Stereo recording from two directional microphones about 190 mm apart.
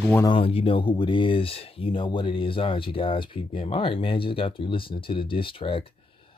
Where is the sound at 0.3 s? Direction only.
30° left (ahead or behind).